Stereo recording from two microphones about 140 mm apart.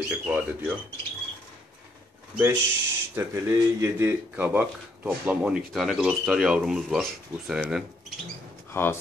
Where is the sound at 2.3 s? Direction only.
15° right (ahead or behind).